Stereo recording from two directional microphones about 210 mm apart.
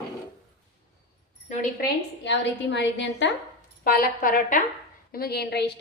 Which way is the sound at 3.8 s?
45° left (ahead or behind).